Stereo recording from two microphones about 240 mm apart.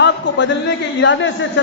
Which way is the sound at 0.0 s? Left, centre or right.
Left.